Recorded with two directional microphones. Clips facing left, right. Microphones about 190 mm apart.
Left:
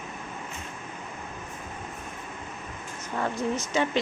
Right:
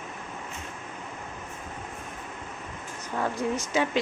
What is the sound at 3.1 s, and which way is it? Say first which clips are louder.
Speech: even; 10° right (ahead or behind).